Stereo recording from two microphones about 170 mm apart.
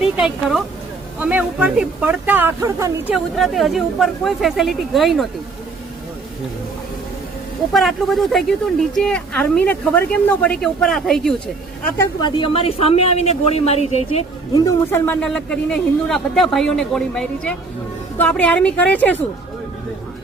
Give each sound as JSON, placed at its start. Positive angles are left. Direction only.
{"t": 0.0, "sound": "speech", "side_deg": -5}
{"t": 3.3, "sound": "a man's voice", "side_deg": 0}
{"t": 7.7, "sound": "a man's voice", "side_deg": 0}
{"t": 11.9, "sound": "speech", "side_deg": 30}
{"t": 14.6, "sound": "a man's voice", "side_deg": 10}